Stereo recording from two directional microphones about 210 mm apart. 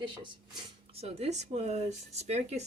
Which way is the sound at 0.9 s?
30° right (ahead or behind).